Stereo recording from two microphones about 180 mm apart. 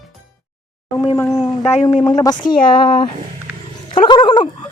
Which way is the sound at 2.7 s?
25° left (ahead or behind).